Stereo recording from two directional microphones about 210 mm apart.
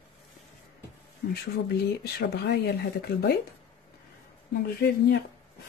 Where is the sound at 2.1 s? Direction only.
50° left (ahead or behind).